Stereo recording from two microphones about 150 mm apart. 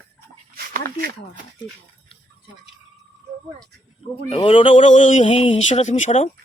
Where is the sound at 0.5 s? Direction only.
80° right.